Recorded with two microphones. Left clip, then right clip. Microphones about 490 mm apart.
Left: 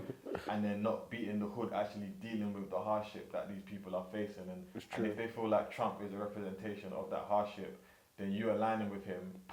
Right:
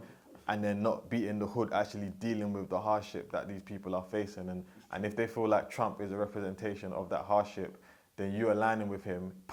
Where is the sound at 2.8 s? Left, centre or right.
Right.